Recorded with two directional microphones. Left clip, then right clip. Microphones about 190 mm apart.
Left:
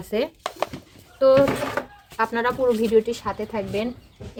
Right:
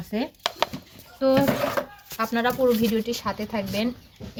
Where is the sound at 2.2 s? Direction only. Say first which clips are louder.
Left 1 dB; 45° left (ahead or behind).